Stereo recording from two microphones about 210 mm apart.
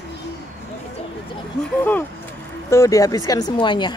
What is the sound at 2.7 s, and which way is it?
Speech, 15° left (ahead or behind).